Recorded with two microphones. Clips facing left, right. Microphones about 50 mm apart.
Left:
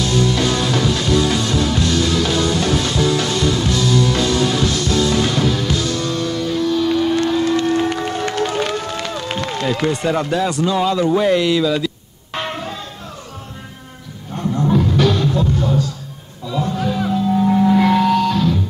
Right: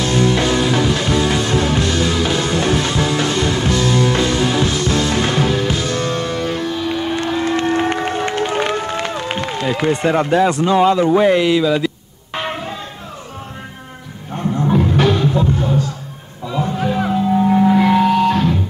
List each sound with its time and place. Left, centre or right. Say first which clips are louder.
0.0 s music: right 2 dB; right
6.7 s run: left 4 dB; right
12.4 s a sound: right 1 dB; centre
14.3 s music: right 1 dB; right
18.3 s music: right 1 dB; right